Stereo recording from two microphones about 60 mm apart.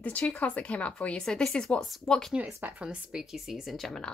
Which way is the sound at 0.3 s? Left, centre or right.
Left.